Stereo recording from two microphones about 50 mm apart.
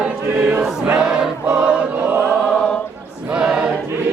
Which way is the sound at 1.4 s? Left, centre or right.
Right.